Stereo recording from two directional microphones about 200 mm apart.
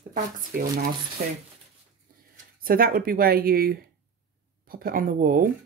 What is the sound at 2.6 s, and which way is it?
Speech, 45° right (ahead or behind).